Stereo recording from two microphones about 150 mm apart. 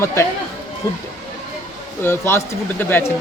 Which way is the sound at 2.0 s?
15° left (ahead or behind).